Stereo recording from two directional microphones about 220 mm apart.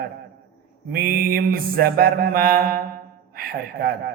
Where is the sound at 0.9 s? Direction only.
40° right (ahead or behind).